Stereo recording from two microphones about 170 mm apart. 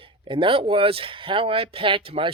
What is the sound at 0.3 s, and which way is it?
Speech, 30° right (ahead or behind).